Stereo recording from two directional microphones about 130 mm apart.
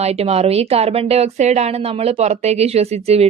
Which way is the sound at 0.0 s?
55° right (ahead or behind).